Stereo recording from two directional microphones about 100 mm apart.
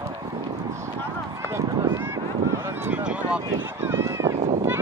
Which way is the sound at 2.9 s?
10° right (ahead or behind).